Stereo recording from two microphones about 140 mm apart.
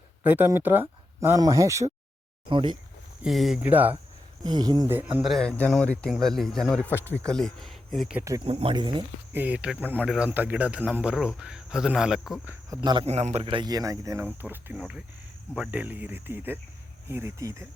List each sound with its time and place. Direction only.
0.2 s speech: 15° right (ahead or behind)
2.5 s speech: 35° right (ahead or behind)
3.2 s speech: centre (ahead or behind)
3.6 s speech: 10° right (ahead or behind)
4.4 s speech: 30° right (ahead or behind)
4.9 s speech: 15° right (ahead or behind)
5.2 s speech: 5° left (ahead or behind)
6.8 s speech: 15° left (ahead or behind)
7.3 s speech: 5° left (ahead or behind)
8.4 s speech: 40° right (ahead or behind)
9.3 s speech: 10° right (ahead or behind)
12.7 s speech: 30° right (ahead or behind)
13.1 s a man's voice: 50° right (ahead or behind)
13.4 s speech: 35° right (ahead or behind); by 17.7 s 20° right (ahead or behind)